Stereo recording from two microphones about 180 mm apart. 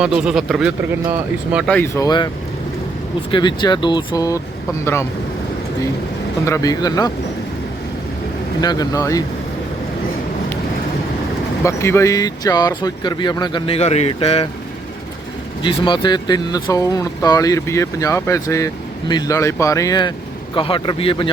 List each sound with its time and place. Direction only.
0.0 s speech: 5° right (ahead or behind)
1.8 s speech: 20° left (ahead or behind)
3.3 s speech: 25° left (ahead or behind)
6.4 s speech: 15° left (ahead or behind)
8.6 s speech: 20° left (ahead or behind)
11.6 s speech: 15° left (ahead or behind); by 14.4 s 30° left (ahead or behind)
15.6 s speech: 25° left (ahead or behind)